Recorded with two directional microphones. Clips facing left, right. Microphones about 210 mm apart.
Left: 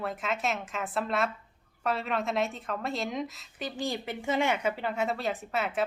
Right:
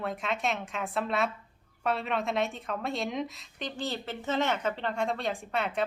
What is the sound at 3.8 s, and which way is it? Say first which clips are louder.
A woman's voice: left 2 dB; 10° left (ahead or behind).